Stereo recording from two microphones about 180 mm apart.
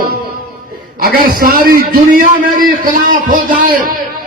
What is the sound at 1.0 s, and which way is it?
A man's voice, 55° right (ahead or behind).